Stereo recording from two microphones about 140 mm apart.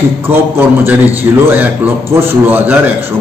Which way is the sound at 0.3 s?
15° right (ahead or behind).